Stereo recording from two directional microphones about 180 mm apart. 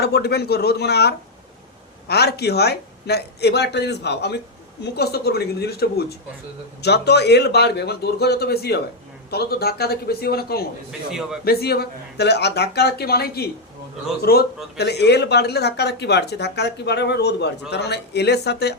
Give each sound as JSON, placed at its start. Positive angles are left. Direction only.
{"t": 0.0, "sound": "a man's voice", "side_deg": 65}